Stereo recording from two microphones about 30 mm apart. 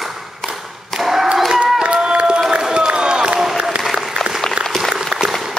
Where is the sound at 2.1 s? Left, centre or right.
Right.